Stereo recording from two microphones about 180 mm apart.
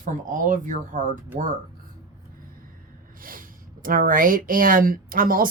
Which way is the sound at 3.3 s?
50° right (ahead or behind).